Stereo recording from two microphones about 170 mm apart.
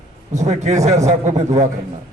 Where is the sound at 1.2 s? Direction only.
20° right (ahead or behind).